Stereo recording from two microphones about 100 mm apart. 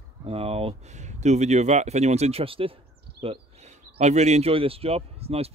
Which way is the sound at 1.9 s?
90° right.